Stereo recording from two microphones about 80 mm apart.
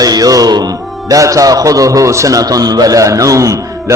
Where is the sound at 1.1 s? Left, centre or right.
Right.